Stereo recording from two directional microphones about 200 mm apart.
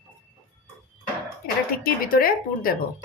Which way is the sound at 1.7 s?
45° left (ahead or behind).